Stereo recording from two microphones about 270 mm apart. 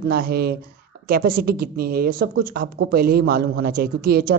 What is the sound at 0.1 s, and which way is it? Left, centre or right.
Speech, right.